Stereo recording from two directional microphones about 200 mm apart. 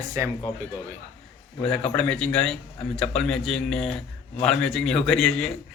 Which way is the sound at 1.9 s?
5° left (ahead or behind).